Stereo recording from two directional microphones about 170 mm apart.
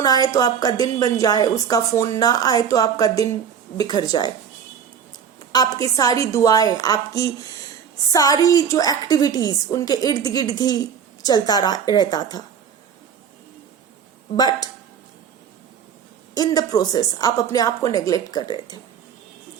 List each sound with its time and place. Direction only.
0.0 s a woman's voice: 25° left (ahead or behind)
5.5 s a woman's voice: 20° left (ahead or behind)
14.3 s a woman's voice: 25° left (ahead or behind)
16.3 s a woman's voice: 25° left (ahead or behind)